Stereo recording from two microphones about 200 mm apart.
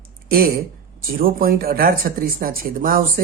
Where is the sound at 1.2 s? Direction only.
45° right (ahead or behind).